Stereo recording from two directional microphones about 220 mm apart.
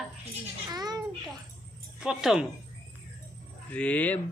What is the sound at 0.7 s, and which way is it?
Speech, 15° right (ahead or behind).